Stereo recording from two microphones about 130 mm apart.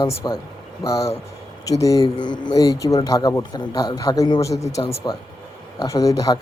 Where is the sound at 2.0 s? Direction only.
40° left (ahead or behind).